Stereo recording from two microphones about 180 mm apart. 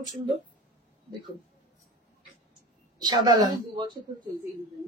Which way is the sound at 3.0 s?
20° right (ahead or behind).